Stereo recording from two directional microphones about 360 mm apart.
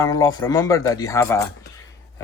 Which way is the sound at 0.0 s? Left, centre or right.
Centre.